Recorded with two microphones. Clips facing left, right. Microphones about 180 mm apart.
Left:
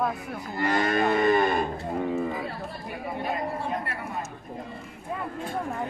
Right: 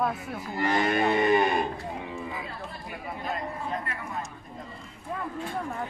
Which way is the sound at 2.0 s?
45° left (ahead or behind).